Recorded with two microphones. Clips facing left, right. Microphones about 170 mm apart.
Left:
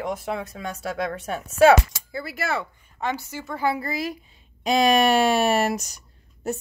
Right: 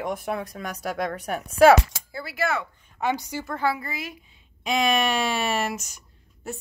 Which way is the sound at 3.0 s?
10° right (ahead or behind).